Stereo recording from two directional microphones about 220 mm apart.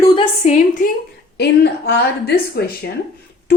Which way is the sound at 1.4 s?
45° left (ahead or behind).